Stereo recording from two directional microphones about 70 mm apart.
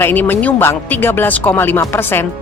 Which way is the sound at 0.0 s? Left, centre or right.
Left.